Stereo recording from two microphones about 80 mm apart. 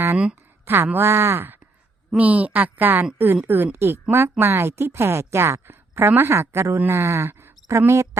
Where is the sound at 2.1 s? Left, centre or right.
Centre.